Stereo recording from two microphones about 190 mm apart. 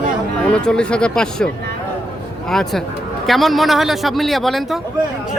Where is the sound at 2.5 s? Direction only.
Centre (ahead or behind).